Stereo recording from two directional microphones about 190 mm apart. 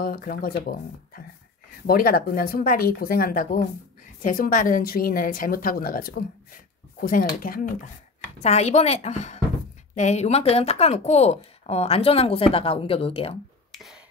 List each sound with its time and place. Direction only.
0.0 s a woman's voice: 50° left (ahead or behind)
8.4 s speech: 35° left (ahead or behind)